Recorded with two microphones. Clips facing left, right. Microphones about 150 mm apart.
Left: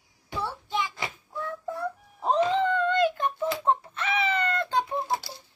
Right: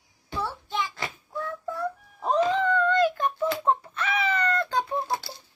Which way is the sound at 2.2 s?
30° left (ahead or behind).